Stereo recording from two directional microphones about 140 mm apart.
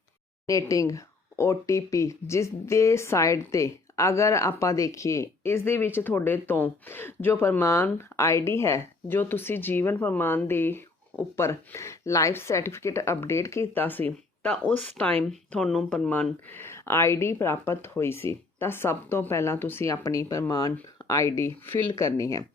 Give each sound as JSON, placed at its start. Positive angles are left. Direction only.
{"t": 0.4, "sound": "speech", "side_deg": 25}